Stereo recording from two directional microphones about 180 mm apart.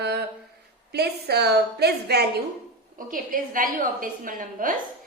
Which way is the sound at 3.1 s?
50° right (ahead or behind).